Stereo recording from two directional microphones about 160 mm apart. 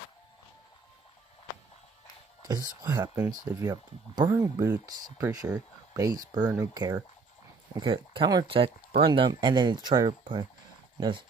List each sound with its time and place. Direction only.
2.5 s speech: 25° right (ahead or behind)